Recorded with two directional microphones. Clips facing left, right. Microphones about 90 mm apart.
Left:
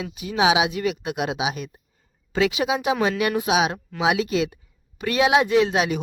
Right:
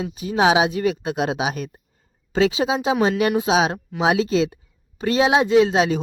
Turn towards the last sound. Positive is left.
turn(degrees=-30)  # may be behind; listen again after turning